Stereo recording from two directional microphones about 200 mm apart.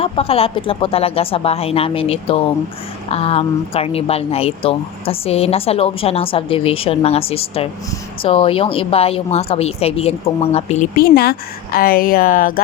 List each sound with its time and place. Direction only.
0.0 s speech: 30° left (ahead or behind)
11.0 s a woman's voice: 50° left (ahead or behind)